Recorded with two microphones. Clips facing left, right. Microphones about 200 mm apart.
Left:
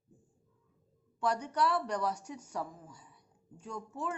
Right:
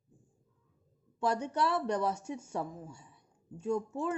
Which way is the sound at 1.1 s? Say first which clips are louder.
Right 1 dB; 25° right (ahead or behind).